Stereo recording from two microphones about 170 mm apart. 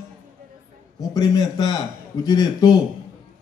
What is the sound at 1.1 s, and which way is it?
A man's voice, 20° left (ahead or behind).